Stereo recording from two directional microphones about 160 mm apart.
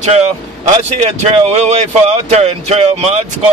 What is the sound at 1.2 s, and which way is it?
Speech, 40° right (ahead or behind).